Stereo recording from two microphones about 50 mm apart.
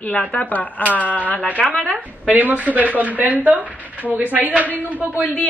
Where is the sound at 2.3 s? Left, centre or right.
Right.